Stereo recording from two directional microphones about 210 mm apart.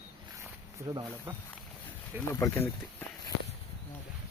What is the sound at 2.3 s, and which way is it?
Speech, 10° left (ahead or behind).